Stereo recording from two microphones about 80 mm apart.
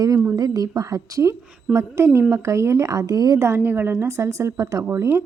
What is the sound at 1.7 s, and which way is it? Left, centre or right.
A woman's voice, right.